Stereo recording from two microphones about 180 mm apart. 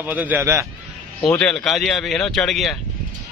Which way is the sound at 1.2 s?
5° left (ahead or behind).